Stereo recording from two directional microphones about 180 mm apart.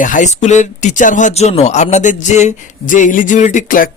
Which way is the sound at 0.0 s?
45° left (ahead or behind).